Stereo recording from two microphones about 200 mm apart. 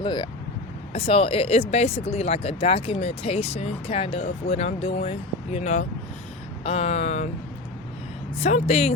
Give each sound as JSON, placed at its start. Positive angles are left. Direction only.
{"t": 0.0, "sound": "speech", "side_deg": 20}
{"t": 8.4, "sound": "speech", "side_deg": 35}